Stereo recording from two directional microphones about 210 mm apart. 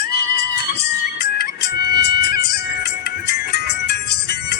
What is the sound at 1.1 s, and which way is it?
Music, 50° left (ahead or behind).